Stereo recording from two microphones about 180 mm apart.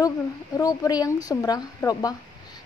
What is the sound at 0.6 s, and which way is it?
A woman's voice, 20° left (ahead or behind).